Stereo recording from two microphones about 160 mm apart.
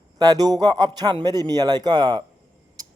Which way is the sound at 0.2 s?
25° right (ahead or behind).